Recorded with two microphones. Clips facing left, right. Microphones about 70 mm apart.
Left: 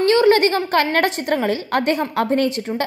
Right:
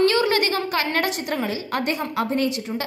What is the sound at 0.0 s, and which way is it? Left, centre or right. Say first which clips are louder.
A woman's voice: left 5 dB; left.